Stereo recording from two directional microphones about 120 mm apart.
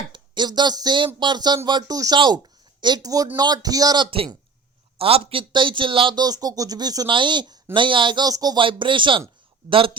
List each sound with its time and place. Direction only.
0.1 s a man's voice: 40° right (ahead or behind)